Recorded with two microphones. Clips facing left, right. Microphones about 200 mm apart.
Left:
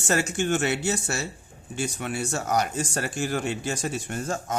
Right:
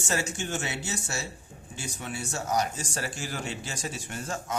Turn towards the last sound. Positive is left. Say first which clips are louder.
# left 5 dB
turn(degrees=45)  # may be behind; listen again after turning